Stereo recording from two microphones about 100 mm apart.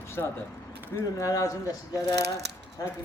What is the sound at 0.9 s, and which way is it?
Speech, 35° left (ahead or behind).